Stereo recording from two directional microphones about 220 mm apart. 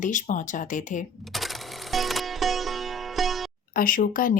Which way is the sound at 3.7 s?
40° left (ahead or behind).